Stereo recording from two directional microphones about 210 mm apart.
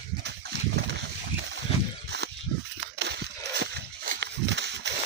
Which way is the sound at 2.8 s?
55° right (ahead or behind).